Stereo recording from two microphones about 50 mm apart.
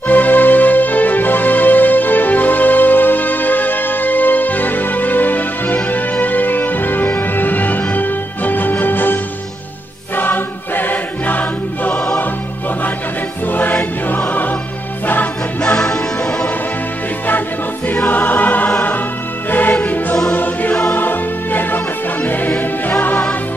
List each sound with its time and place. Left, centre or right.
0.1 s music: left
13.5 s music: left
15.6 s music: centre
18.0 s choir: left
19.7 s music: left